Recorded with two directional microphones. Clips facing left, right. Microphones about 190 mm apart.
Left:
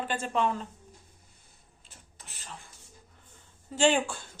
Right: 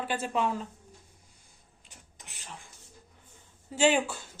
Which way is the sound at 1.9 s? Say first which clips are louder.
Even; 15° right (ahead or behind).